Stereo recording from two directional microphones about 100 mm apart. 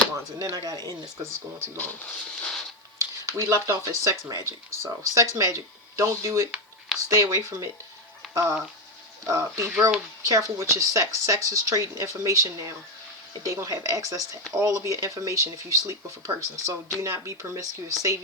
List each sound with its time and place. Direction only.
0.5 s speech: 40° right (ahead or behind)
1.8 s speech: 15° left (ahead or behind)
3.3 s speech: 30° right (ahead or behind)
6.5 s a sound: 5° right (ahead or behind)
7.2 s speech: 35° right (ahead or behind)